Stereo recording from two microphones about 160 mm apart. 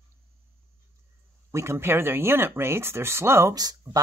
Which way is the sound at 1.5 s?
15° right (ahead or behind).